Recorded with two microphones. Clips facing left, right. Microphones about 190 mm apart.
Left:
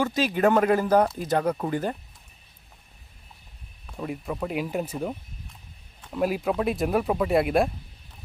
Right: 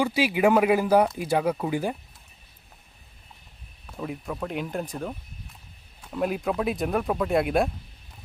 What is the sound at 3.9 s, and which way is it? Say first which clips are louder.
Speech: left 1 dB; centre (ahead or behind).